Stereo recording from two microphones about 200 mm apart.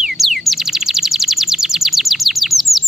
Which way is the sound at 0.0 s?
Centre (ahead or behind).